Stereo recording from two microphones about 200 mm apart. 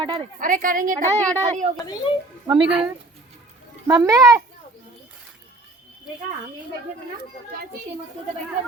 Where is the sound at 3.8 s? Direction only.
15° right (ahead or behind).